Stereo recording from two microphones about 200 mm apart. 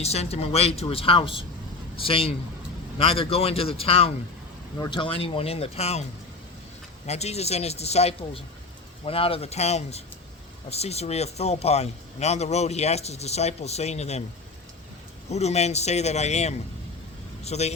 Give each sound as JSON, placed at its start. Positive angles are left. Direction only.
{"t": 0.0, "sound": "speech", "side_deg": 30}
{"t": 7.1, "sound": "speech", "side_deg": 35}
{"t": 15.3, "sound": "a man's voice", "side_deg": 35}